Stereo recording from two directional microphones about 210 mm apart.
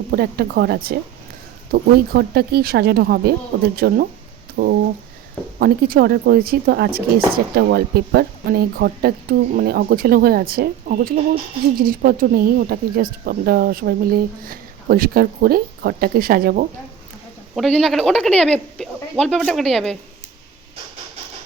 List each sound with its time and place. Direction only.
0.1 s speech: 50° right (ahead or behind)
17.5 s speech: centre (ahead or behind)